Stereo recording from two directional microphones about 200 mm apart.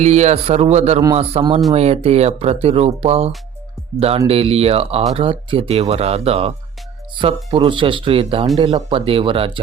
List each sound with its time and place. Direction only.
0.0 s speech: 35° right (ahead or behind)